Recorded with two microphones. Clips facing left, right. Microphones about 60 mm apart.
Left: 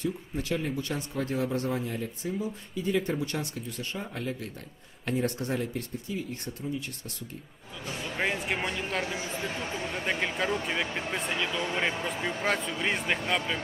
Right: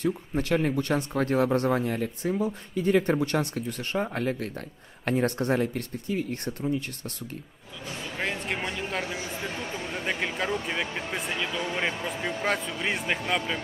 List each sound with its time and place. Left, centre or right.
0.0 s speech: right
8.2 s speech: centre